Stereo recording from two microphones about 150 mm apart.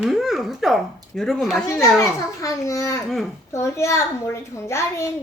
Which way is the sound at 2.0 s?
20° left (ahead or behind).